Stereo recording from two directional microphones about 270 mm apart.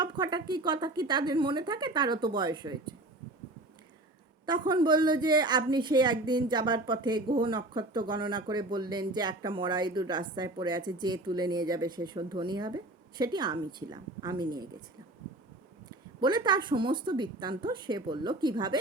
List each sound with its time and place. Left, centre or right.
0.0 s a woman's voice: centre
4.4 s a woman's voice: centre
16.2 s a woman's voice: centre